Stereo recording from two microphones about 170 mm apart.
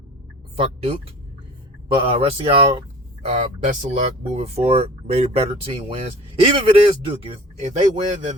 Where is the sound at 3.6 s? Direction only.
40° right (ahead or behind).